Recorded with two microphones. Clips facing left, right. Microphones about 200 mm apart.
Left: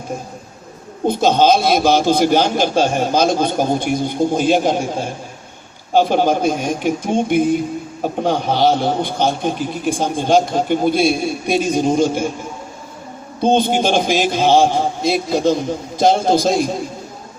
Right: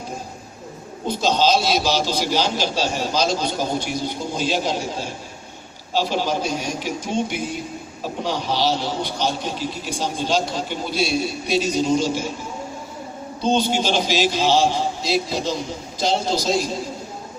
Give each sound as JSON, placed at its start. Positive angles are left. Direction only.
{"t": 1.0, "sound": "a man's voice", "side_deg": 55}
{"t": 13.4, "sound": "a man's voice", "side_deg": 55}